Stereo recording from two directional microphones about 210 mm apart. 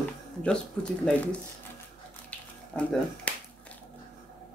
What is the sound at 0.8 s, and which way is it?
Speech, 5° left (ahead or behind).